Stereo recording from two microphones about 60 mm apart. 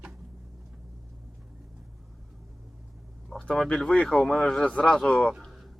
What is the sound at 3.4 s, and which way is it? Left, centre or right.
Speech, centre.